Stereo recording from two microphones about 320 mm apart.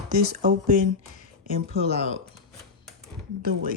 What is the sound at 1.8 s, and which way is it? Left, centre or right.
Speech, centre.